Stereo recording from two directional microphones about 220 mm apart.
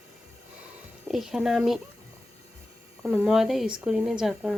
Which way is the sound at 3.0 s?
Centre (ahead or behind).